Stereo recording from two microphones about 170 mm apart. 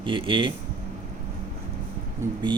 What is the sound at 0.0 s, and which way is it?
Speech, 30° right (ahead or behind).